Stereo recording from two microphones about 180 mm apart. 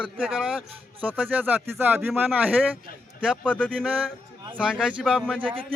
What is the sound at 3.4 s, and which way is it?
Speech, 5° left (ahead or behind).